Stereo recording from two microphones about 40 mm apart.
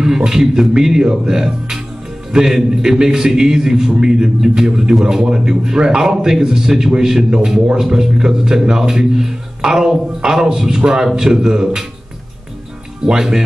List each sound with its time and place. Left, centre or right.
0.0 s a man's voice: centre
11.1 s a man's voice: centre
13.0 s a man's voice: centre